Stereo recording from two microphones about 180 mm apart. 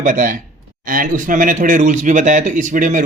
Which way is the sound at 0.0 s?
45° right (ahead or behind).